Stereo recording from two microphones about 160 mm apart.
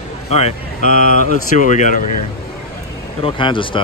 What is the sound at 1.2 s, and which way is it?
Speech, 50° left (ahead or behind).